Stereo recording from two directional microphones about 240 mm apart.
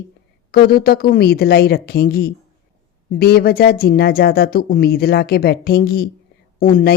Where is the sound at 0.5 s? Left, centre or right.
Left.